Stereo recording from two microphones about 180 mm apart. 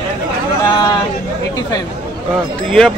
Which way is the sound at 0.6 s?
25° left (ahead or behind).